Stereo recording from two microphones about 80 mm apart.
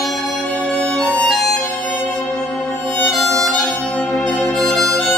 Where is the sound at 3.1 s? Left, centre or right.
Centre.